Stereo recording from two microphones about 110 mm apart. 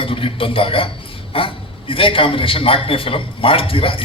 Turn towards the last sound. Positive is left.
turn(degrees=55)  # may be behind; listen again after turning